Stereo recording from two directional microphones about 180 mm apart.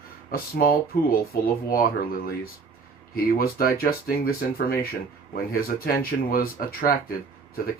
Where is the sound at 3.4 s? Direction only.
55° left (ahead or behind).